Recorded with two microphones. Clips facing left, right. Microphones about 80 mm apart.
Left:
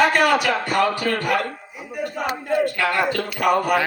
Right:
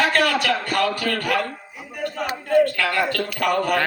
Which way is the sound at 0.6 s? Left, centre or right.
Left.